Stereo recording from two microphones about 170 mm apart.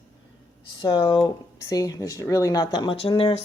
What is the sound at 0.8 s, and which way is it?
Speech, 25° left (ahead or behind).